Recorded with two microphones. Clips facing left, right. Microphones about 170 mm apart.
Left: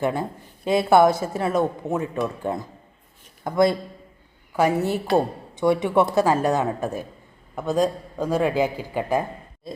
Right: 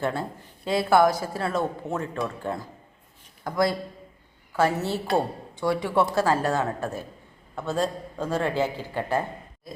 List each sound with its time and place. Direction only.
0.0 s a woman's voice: 15° left (ahead or behind)